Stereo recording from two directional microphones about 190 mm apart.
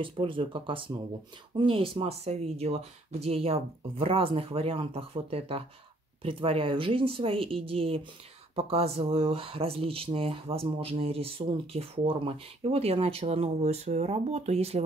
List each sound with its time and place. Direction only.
0.0 s speech: 25° right (ahead or behind)